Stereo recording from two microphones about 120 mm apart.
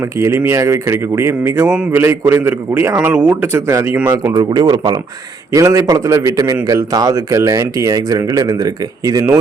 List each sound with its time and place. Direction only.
0.0 s speech: 20° right (ahead or behind)